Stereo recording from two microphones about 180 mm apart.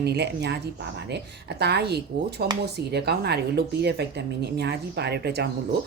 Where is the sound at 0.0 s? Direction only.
65° right (ahead or behind).